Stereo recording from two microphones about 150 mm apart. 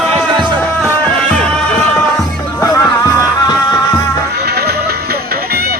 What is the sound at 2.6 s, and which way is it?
Music, 20° left (ahead or behind).